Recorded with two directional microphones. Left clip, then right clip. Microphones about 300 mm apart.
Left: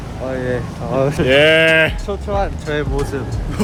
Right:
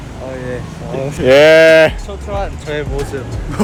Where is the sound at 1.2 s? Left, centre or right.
Centre.